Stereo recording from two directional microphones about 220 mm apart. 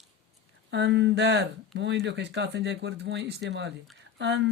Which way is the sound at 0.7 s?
55° right (ahead or behind).